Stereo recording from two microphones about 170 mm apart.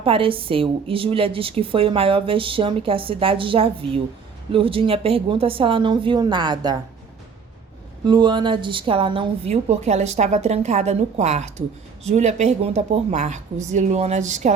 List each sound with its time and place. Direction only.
0.0 s a woman's voice: 30° right (ahead or behind)
8.0 s a woman's voice: 25° right (ahead or behind); by 14.5 s 45° right (ahead or behind)